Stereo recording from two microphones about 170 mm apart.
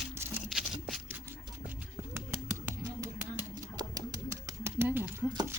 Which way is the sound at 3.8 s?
20° right (ahead or behind).